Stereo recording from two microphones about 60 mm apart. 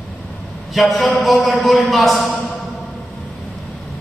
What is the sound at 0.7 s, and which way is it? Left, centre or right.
A man's voice, centre.